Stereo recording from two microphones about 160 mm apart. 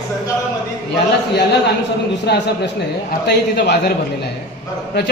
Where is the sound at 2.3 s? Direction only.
90° left.